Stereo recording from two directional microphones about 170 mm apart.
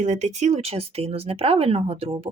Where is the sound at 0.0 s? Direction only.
45° right (ahead or behind).